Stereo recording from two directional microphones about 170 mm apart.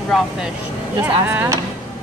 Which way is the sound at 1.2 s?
10° right (ahead or behind).